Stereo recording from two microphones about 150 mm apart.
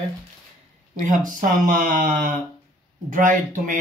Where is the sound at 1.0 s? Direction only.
60° right (ahead or behind).